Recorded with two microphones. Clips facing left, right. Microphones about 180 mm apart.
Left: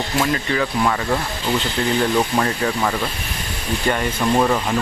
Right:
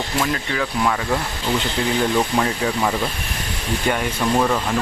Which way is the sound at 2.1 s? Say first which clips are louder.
Left 1 dB; centre (ahead or behind).